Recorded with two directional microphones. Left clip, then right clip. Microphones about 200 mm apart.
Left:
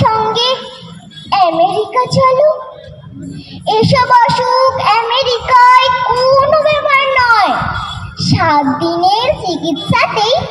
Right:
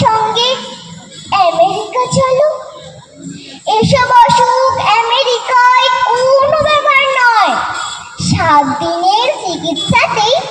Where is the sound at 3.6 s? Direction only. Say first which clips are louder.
Even; 40° left (ahead or behind).